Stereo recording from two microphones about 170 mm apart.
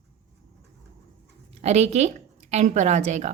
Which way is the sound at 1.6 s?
40° right (ahead or behind).